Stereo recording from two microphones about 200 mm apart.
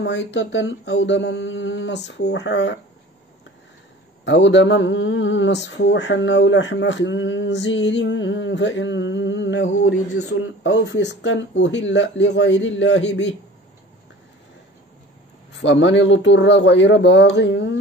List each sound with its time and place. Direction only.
0.0 s speech: 60° left (ahead or behind)
4.2 s speech: 65° left (ahead or behind)
15.5 s speech: 65° left (ahead or behind)